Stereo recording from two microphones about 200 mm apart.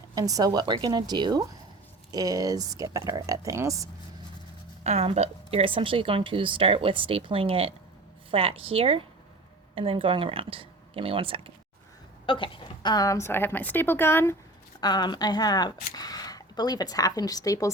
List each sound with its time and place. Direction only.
0.1 s a woman's voice: 20° right (ahead or behind)
4.8 s a woman's voice: 30° right (ahead or behind)
12.2 s a woman's voice: 25° left (ahead or behind)